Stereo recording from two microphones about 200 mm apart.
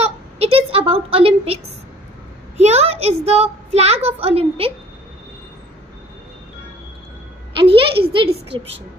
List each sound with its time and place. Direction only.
0.4 s a woman's voice: 30° right (ahead or behind)
2.6 s a woman's voice: 30° right (ahead or behind)
7.5 s a child's voice: 25° right (ahead or behind)